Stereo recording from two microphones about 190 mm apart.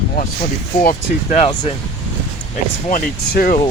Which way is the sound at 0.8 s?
40° left (ahead or behind).